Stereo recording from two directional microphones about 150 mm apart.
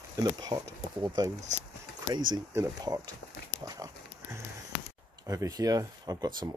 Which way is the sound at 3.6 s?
20° right (ahead or behind).